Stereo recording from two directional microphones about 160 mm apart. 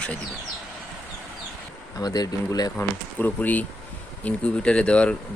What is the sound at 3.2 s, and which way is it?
Speech, 10° left (ahead or behind).